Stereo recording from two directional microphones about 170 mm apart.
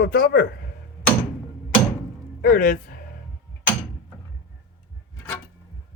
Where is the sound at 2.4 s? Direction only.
50° left (ahead or behind).